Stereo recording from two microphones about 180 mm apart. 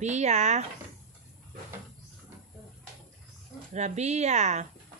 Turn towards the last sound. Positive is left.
turn(degrees=-40)  # may be behind; listen again after turning